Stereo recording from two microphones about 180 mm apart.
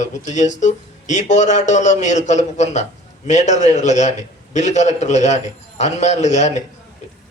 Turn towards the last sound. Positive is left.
turn(degrees=40)  # may be behind; listen again after turning